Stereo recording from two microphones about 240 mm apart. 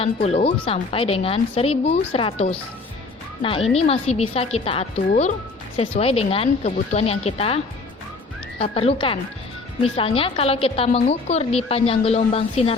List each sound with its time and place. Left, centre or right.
0.0 s speech: left
3.8 s speech: left